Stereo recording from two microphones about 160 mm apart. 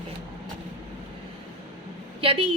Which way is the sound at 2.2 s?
35° right (ahead or behind).